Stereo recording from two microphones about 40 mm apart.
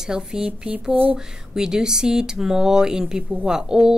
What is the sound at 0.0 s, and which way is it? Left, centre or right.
Speech, centre.